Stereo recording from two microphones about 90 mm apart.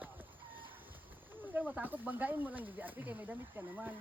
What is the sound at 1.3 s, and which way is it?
Speech, 20° right (ahead or behind).